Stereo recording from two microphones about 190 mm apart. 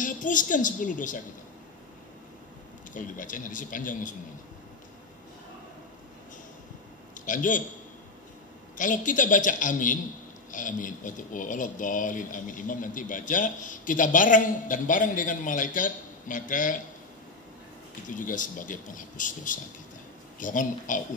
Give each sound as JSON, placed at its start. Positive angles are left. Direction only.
{"t": 0.0, "sound": "speech", "side_deg": 45}
{"t": 2.9, "sound": "speech", "side_deg": 45}
{"t": 7.2, "sound": "speech", "side_deg": 45}
{"t": 8.7, "sound": "speech", "side_deg": 45}
{"t": 18.0, "sound": "speech", "side_deg": 45}